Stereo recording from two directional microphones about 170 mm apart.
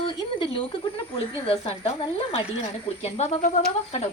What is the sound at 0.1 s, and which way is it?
Speech, 30° left (ahead or behind).